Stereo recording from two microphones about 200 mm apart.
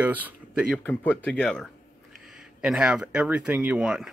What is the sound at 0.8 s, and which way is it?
Speech, 10° left (ahead or behind).